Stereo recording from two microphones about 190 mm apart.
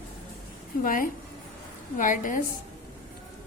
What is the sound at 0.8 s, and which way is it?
A woman's voice, 45° left (ahead or behind).